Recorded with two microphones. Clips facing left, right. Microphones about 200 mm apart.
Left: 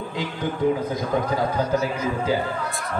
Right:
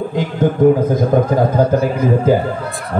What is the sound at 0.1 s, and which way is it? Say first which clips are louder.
A man's voice: right 10 dB; 50° right (ahead or behind).